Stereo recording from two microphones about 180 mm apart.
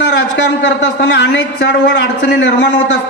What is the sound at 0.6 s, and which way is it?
A man's voice, 85° left.